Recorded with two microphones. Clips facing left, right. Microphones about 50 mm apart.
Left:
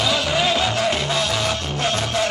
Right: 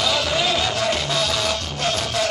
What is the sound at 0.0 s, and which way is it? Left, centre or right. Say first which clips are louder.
Music: left 1 dB; centre.